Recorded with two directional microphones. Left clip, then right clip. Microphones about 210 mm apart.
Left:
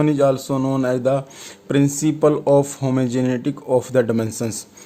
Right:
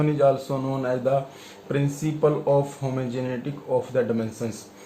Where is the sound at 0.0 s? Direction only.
55° left (ahead or behind).